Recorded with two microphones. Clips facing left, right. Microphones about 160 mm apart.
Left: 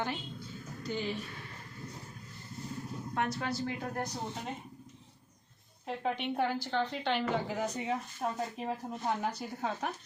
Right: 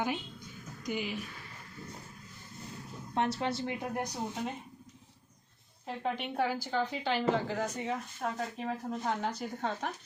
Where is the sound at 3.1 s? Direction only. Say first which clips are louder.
Right 3 dB; 25° right (ahead or behind).